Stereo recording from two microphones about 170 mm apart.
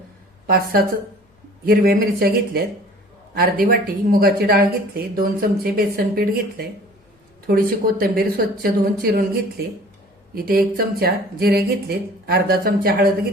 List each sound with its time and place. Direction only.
0.4 s speech: 65° right (ahead or behind)